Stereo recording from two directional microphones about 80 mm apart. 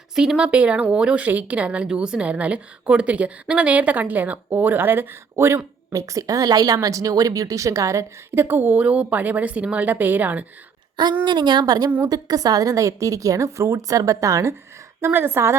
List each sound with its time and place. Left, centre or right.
0.2 s a woman's voice: centre; by 5.6 s right
5.9 s a woman's voice: right
11.3 s a woman's voice: right
15.0 s a woman's voice: right